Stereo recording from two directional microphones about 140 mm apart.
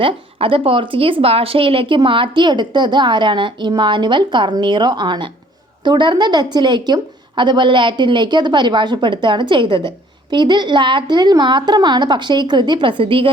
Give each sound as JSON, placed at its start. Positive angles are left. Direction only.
{"t": 0.0, "sound": "a woman's voice", "side_deg": -40}